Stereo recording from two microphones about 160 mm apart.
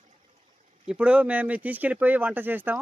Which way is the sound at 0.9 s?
10° right (ahead or behind).